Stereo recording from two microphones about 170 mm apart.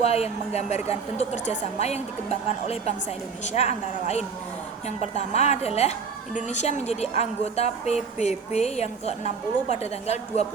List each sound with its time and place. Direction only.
0.0 s a woman's voice: 40° left (ahead or behind)
5.3 s a woman's voice: 40° left (ahead or behind)